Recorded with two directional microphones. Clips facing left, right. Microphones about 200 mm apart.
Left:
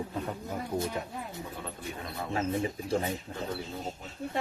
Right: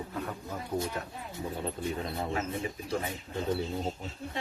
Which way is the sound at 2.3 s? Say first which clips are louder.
Left 3 dB; 30° left (ahead or behind).